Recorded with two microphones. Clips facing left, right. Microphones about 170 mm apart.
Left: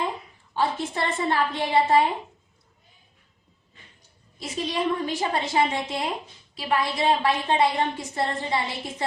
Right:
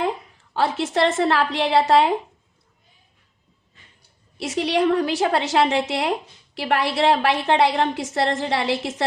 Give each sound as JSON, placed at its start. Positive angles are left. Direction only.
{"t": 0.5, "sound": "a woman's voice", "side_deg": -90}
{"t": 4.4, "sound": "a woman's voice", "side_deg": -80}